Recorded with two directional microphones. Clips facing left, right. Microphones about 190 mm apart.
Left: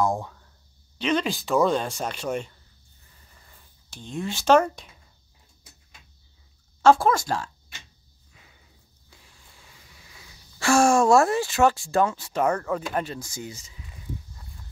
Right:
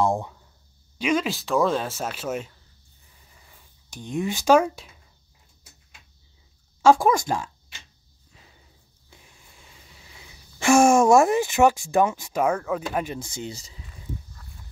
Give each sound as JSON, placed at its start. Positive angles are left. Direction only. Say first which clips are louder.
{"t": 0.0, "sound": "speech", "louder": "right 2 dB", "side_deg": -25}
{"t": 0.9, "sound": "speech", "louder": "right 1 dB", "side_deg": -10}
{"t": 3.9, "sound": "speech", "louder": "right 4 dB", "side_deg": -15}
{"t": 6.8, "sound": "speech", "louder": "right 1 dB", "side_deg": -15}
{"t": 9.1, "sound": "a sound", "louder": "right 2 dB", "side_deg": -20}
{"t": 13.1, "sound": "speech", "louder": "right 3 dB", "side_deg": -25}